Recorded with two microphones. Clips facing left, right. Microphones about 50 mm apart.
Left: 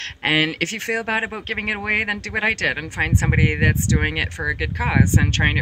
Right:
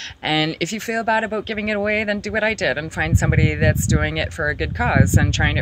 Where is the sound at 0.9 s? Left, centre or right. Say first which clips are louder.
Right 6 dB; left.